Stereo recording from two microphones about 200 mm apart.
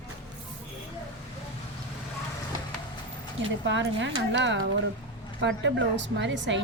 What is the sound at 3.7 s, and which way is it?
A woman's voice, 65° right (ahead or behind).